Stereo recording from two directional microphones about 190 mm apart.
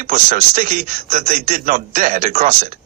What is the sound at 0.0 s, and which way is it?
A man's voice, 45° right (ahead or behind).